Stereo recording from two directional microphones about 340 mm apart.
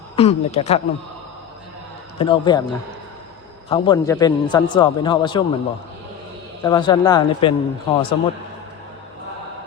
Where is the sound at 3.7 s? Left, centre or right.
Centre.